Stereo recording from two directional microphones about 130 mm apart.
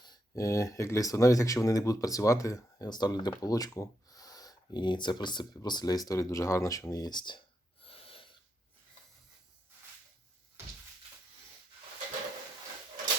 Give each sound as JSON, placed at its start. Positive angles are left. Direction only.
{"t": 0.0, "sound": "speech", "side_deg": 30}